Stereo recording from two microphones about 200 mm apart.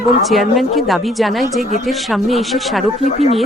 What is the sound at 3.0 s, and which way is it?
Speech, 30° left (ahead or behind).